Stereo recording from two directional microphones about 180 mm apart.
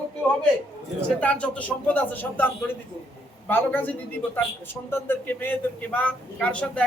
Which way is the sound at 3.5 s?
10° left (ahead or behind).